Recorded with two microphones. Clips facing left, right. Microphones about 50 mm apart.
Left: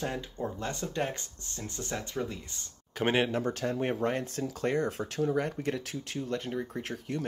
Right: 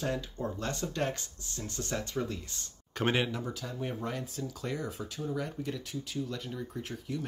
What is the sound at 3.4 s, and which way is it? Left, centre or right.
Speech, left.